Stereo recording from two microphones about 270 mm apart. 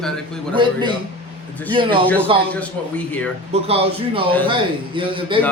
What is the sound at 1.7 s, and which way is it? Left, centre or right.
Speech, centre.